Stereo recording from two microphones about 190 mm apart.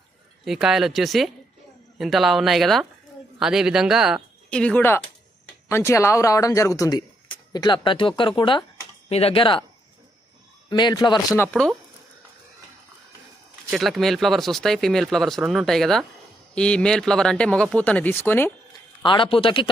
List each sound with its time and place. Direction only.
0.4 s speech: centre (ahead or behind); by 9.6 s 25° left (ahead or behind)
10.7 s speech: 25° left (ahead or behind)
13.7 s speech: centre (ahead or behind)
18.7 s a man's voice: 25° left (ahead or behind)